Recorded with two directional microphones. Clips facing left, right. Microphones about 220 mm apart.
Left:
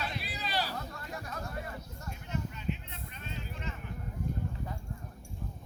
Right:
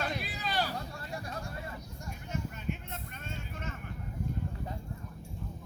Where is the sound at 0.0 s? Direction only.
50° right (ahead or behind).